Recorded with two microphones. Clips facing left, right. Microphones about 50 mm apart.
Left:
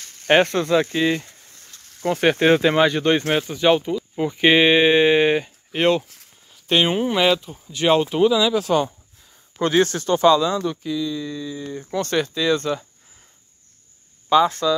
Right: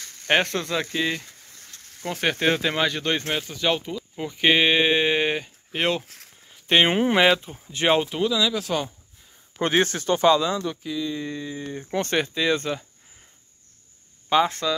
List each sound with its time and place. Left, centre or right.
0.3 s speech: centre
3.3 s speech: left
4.2 s speech: centre
6.0 s a sound: right
6.9 s speech: right
7.2 s speech: right
8.2 s speech: centre
9.6 s speech: right
9.8 s speech: centre
11.0 s speech: right
11.9 s speech: right
14.3 s speech: centre